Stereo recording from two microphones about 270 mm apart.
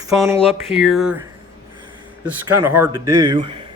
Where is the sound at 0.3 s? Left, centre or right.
Centre.